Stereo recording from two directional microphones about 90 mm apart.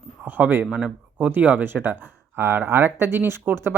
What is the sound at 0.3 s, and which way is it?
Speech, 20° right (ahead or behind).